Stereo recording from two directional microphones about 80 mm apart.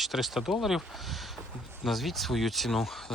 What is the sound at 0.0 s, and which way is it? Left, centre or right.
Speech, centre.